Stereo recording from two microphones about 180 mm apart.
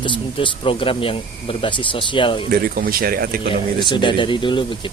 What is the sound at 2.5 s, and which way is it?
Speech, 55° right (ahead or behind).